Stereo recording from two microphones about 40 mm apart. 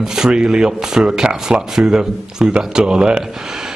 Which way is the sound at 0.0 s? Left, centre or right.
Centre.